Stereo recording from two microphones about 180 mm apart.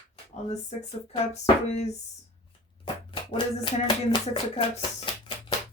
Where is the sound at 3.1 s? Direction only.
30° left (ahead or behind).